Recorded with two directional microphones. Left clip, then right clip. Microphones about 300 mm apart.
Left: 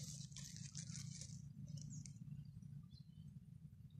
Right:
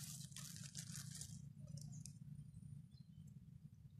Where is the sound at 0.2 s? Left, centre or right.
Right.